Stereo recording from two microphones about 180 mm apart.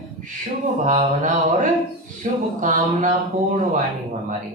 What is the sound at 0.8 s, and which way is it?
A woman's voice, 45° right (ahead or behind).